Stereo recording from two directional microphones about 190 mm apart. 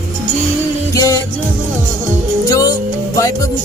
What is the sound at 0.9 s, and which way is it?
Music, 15° left (ahead or behind).